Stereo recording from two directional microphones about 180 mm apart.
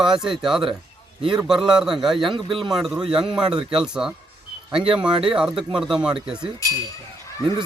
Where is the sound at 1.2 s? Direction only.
25° right (ahead or behind).